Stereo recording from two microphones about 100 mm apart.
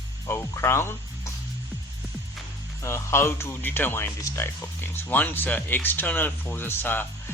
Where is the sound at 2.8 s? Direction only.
30° left (ahead or behind).